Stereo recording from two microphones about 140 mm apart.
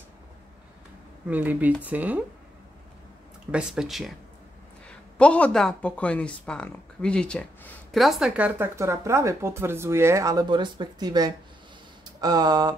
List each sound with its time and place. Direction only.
1.2 s speech: 10° right (ahead or behind)
3.5 s speech: 5° right (ahead or behind)
4.8 s speech: 10° left (ahead or behind); by 12.7 s 30° right (ahead or behind)